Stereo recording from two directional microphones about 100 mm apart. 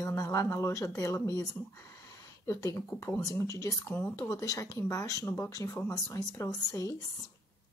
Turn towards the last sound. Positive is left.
turn(degrees=35)  # may be behind; listen again after turning